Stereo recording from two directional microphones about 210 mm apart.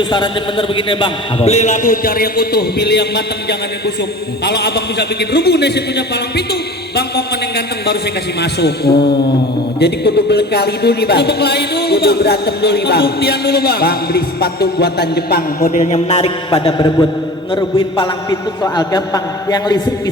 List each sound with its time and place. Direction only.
0.0 s a man's voice: 20° left (ahead or behind); by 3.2 s 50° left (ahead or behind)
4.4 s a man's voice: 50° left (ahead or behind); by 19.9 s 20° left (ahead or behind)